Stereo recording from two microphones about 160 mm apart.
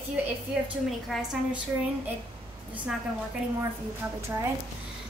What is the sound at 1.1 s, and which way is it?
Speech, centre (ahead or behind).